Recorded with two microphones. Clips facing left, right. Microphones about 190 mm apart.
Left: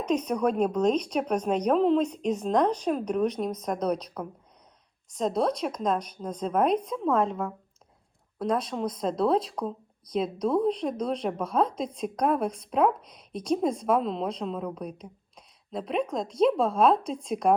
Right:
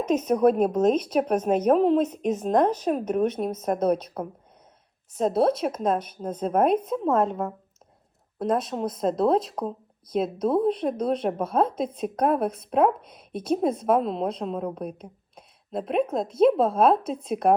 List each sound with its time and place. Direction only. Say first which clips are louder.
0.0 s speech: right 5 dB; 5° right (ahead or behind)
5.1 s speech: right 4 dB; centre (ahead or behind)
8.4 s speech: right 2 dB; 5° right (ahead or behind)